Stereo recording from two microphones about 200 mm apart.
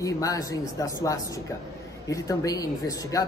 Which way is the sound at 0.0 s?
15° left (ahead or behind).